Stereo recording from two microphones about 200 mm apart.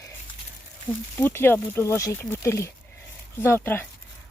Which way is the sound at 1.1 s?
10° left (ahead or behind).